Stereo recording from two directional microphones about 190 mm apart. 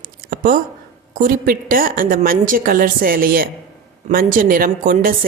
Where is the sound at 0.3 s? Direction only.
45° right (ahead or behind).